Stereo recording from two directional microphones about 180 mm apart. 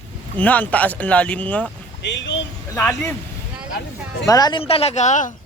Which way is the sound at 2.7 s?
15° left (ahead or behind).